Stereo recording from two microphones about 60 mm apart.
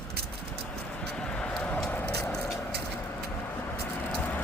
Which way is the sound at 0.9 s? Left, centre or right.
Centre.